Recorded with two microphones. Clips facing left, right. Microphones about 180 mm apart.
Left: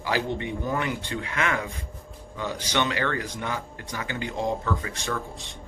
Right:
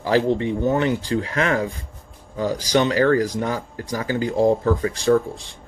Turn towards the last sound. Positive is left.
turn(degrees=-30)  # may be behind; listen again after turning